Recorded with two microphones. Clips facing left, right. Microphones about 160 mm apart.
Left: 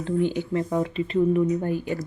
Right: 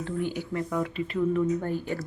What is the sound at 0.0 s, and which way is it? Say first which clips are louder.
Speech: left 6 dB; 20° left (ahead or behind).